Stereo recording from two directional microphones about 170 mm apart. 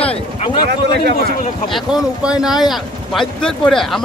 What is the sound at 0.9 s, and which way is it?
Speech, 75° right (ahead or behind).